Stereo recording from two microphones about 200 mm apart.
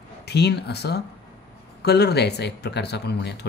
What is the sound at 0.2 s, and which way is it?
Speech, 55° left (ahead or behind).